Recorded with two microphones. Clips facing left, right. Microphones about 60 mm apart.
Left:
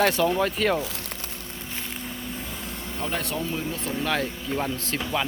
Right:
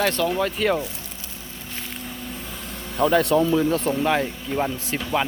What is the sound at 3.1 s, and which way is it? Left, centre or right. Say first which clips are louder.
Speech: right 11 dB; right.